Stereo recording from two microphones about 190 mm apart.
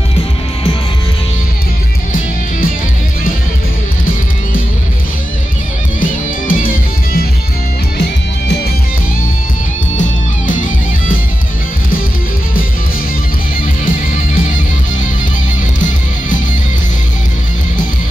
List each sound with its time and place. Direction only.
5.9 s music: 45° left (ahead or behind)
9.9 s music: 45° left (ahead or behind)